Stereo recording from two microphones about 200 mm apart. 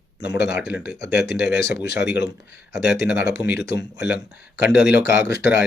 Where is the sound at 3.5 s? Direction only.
55° left (ahead or behind).